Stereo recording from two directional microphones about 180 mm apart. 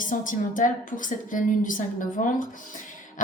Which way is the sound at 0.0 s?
45° left (ahead or behind).